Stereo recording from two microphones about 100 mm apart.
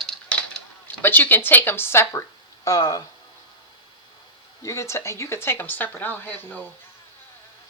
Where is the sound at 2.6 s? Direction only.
35° left (ahead or behind).